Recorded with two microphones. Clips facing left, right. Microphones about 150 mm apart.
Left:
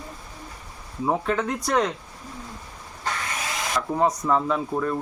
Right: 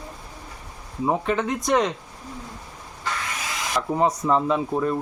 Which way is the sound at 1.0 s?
5° right (ahead or behind).